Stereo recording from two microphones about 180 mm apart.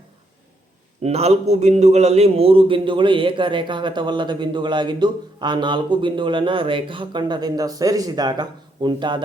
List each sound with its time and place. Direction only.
1.0 s a man's voice: 35° right (ahead or behind)